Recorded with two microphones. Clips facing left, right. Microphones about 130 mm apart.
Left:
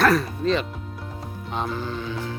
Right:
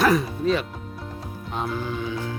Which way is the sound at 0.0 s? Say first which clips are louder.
Even; 10° right (ahead or behind).